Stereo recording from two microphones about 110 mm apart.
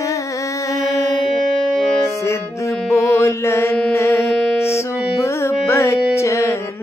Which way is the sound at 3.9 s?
25° left (ahead or behind).